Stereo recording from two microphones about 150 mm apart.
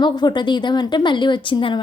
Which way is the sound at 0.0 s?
30° left (ahead or behind).